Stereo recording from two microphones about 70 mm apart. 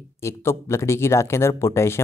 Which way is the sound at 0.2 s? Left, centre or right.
Left.